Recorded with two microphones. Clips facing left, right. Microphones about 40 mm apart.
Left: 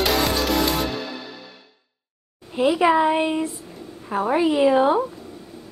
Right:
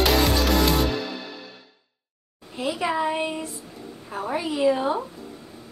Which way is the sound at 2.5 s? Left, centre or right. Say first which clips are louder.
Left 8 dB; left.